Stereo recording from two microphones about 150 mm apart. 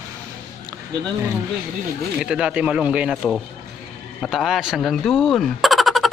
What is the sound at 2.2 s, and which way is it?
Speech, 5° right (ahead or behind).